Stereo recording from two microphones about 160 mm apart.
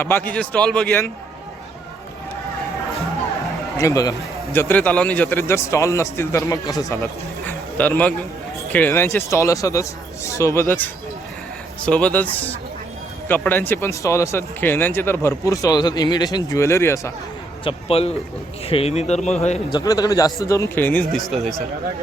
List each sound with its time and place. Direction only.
0.0 s speech: 15° left (ahead or behind)
3.8 s a man's voice: 20° left (ahead or behind)
7.4 s a sound: 10° left (ahead or behind)
8.7 s speech: 10° left (ahead or behind)
17.6 s a man's voice: 35° left (ahead or behind)
19.7 s a man's voice: 25° left (ahead or behind); by 21.3 s 5° left (ahead or behind)